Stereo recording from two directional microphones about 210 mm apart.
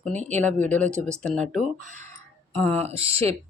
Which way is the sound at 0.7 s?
5° left (ahead or behind).